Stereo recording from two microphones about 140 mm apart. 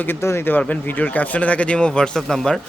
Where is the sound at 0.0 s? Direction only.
15° left (ahead or behind).